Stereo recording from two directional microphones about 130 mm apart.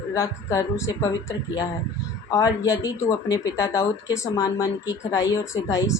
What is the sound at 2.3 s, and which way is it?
Speech, 25° left (ahead or behind).